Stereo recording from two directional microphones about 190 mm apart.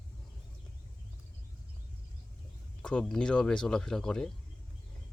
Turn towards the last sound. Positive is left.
turn(degrees=5)  # may be behind; listen again after turning